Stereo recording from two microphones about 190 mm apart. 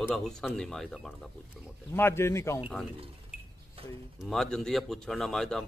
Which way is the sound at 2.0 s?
15° left (ahead or behind).